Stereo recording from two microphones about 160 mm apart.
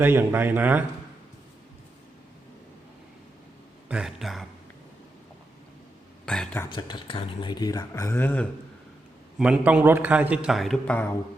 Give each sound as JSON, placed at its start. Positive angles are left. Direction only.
{"t": 0.0, "sound": "a man's voice", "side_deg": -15}
{"t": 3.8, "sound": "speech", "side_deg": -5}
{"t": 6.2, "sound": "speech", "side_deg": 5}
{"t": 6.7, "sound": "speech", "side_deg": 30}
{"t": 9.4, "sound": "a man's voice", "side_deg": -5}